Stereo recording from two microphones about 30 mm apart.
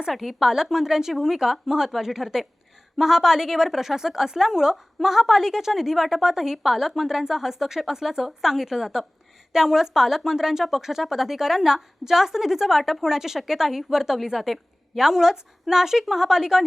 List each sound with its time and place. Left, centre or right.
0.1 s a woman's voice: centre